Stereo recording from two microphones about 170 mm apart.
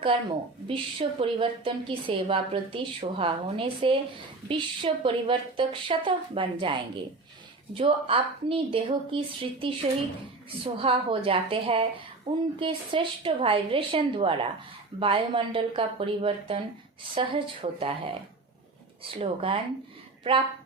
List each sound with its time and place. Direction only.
0.0 s a woman's voice: 30° right (ahead or behind)